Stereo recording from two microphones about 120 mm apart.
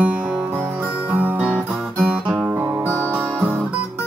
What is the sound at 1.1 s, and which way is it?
Guitar, 15° right (ahead or behind).